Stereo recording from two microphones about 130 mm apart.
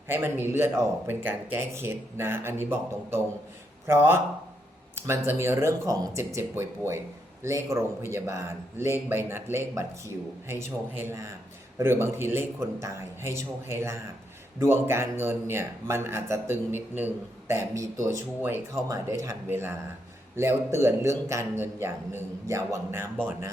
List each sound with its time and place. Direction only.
0.1 s speech: 15° right (ahead or behind)
5.0 s a man's voice: 20° right (ahead or behind)